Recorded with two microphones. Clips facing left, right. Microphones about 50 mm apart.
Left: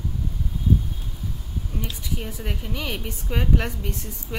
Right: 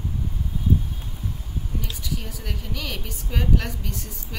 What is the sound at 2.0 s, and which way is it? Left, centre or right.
A woman's voice, left.